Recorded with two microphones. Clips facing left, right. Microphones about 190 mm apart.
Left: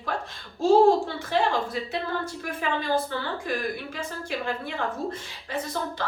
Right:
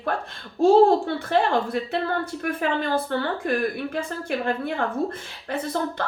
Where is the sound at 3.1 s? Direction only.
55° right (ahead or behind).